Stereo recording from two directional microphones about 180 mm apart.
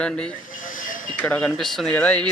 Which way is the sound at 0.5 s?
50° left (ahead or behind).